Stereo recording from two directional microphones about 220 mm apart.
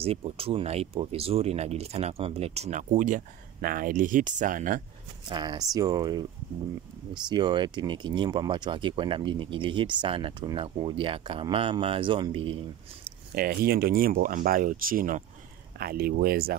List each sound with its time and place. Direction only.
0.0 s speech: 25° right (ahead or behind)
5.3 s speech: 20° right (ahead or behind)
7.2 s speech: 20° right (ahead or behind)
13.3 s speech: 40° right (ahead or behind)